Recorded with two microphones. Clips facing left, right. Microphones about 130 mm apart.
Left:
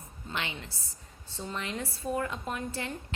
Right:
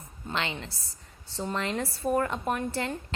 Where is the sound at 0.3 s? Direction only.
90° right.